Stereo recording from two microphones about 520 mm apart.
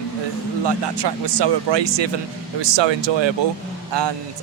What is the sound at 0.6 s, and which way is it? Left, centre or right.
A man's voice, right.